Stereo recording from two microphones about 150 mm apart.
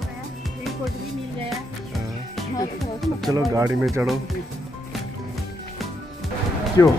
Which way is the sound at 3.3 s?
20° right (ahead or behind).